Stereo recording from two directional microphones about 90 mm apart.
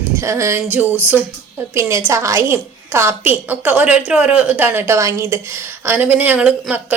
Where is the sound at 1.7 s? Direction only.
30° right (ahead or behind); by 6.5 s 15° right (ahead or behind).